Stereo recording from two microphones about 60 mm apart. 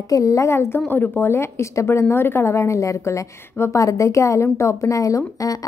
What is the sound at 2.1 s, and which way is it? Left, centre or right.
A woman's voice, left.